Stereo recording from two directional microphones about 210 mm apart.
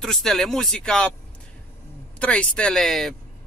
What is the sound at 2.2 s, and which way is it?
Speech, 5° left (ahead or behind).